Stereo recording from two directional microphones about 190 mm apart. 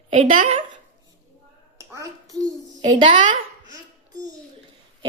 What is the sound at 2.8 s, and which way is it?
Speech, 40° right (ahead or behind).